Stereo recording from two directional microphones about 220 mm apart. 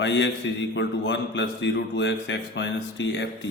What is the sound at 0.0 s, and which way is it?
A man's voice, 55° left (ahead or behind).